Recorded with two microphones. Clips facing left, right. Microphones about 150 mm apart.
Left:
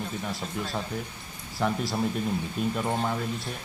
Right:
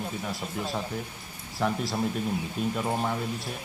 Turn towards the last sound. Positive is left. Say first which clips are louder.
# even
turn(degrees=-5)  # may be behind; listen again after turning